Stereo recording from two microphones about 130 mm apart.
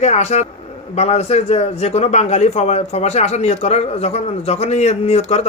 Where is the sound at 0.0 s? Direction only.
60° left (ahead or behind).